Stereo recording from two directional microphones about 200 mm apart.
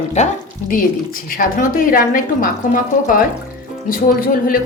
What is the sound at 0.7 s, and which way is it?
A woman's voice, 45° left (ahead or behind).